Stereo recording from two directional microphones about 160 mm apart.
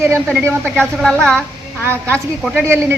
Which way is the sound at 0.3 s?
10° right (ahead or behind).